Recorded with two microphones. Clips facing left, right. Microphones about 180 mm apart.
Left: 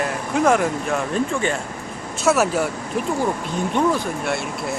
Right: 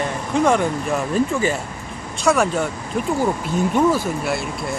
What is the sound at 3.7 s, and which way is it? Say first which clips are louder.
Speech: right 1 dB; 5° right (ahead or behind).